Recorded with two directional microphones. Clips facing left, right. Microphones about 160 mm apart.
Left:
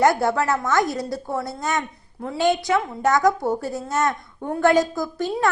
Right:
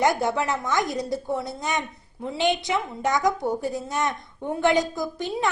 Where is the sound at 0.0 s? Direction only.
20° right (ahead or behind).